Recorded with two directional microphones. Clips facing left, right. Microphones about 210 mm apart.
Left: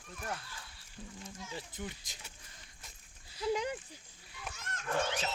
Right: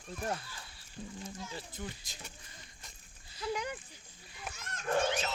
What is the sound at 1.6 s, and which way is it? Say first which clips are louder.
Speech: even; 20° left (ahead or behind).